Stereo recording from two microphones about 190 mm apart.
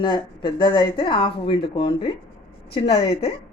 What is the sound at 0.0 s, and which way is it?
Speech, 25° left (ahead or behind).